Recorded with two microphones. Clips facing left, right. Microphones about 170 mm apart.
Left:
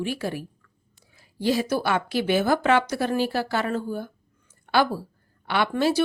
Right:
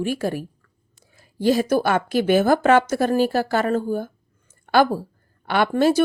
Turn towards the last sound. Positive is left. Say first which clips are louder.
# right 5 dB
turn(degrees=-50)  # may be behind; listen again after turning